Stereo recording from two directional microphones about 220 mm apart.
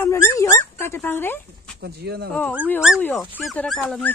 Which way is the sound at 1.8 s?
45° right (ahead or behind).